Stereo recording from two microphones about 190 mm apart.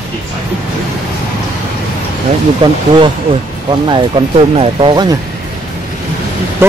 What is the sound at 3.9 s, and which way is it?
Speech, 25° right (ahead or behind).